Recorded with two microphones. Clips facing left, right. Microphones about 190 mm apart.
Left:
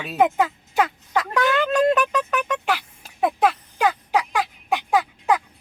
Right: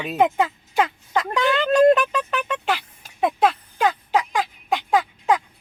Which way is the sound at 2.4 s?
10° left (ahead or behind).